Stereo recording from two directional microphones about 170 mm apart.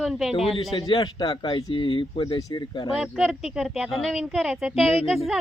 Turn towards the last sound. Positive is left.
turn(degrees=0)  # may be behind; listen again after turning